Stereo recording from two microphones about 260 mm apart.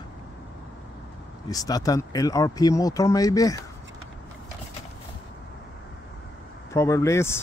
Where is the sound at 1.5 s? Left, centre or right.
Centre.